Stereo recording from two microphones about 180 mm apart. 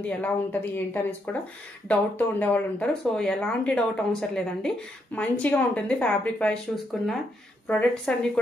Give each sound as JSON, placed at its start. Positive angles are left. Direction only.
{"t": 0.0, "sound": "speech", "side_deg": 10}